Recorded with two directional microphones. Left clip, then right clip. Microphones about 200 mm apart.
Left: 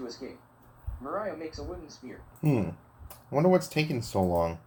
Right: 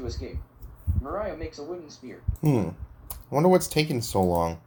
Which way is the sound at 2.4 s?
25° right (ahead or behind).